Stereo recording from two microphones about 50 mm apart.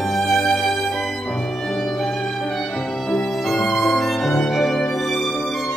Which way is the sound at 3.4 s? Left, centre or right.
Centre.